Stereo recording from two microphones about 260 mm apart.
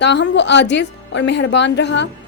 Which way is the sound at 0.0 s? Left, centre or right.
Left.